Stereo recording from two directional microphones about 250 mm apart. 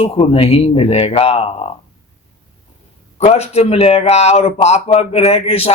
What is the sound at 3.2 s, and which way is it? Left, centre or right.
A man's voice, left.